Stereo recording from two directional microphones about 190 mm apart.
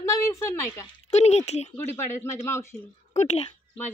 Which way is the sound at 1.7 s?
10° left (ahead or behind).